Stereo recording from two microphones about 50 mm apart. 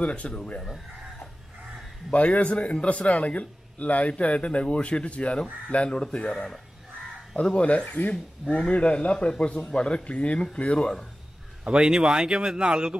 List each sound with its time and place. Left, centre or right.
0.0 s a man's voice: left
2.0 s a man's voice: left
7.4 s a man's voice: left
11.6 s speech: centre